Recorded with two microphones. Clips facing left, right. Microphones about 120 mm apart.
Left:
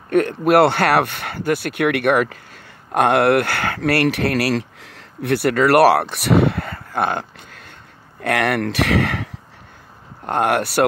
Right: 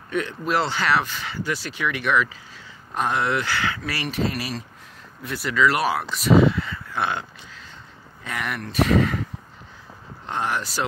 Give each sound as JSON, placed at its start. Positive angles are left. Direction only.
{"t": 0.1, "sound": "speech", "side_deg": 55}
{"t": 8.2, "sound": "speech", "side_deg": 75}
{"t": 10.2, "sound": "speech", "side_deg": 55}